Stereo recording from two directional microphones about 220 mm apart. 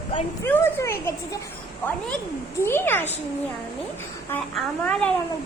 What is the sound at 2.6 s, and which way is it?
Speech, 10° left (ahead or behind).